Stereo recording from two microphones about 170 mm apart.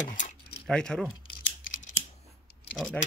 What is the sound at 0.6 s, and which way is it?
Speech, 5° left (ahead or behind).